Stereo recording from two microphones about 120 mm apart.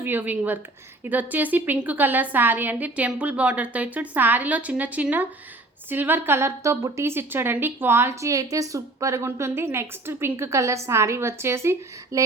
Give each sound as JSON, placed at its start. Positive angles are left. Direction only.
{"t": 0.0, "sound": "a woman's voice", "side_deg": -15}